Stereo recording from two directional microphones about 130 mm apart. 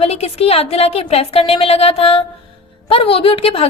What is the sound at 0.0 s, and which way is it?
A woman's voice, 50° left (ahead or behind).